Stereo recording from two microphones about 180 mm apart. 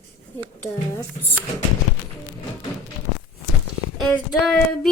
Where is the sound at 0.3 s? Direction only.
15° left (ahead or behind).